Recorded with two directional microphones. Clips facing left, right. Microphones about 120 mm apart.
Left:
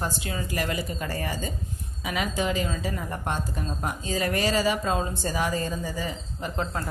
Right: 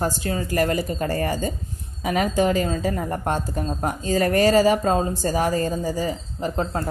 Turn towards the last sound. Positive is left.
turn(degrees=-35)  # may be behind; listen again after turning